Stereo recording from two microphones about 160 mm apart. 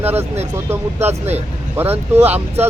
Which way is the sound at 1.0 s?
40° right (ahead or behind).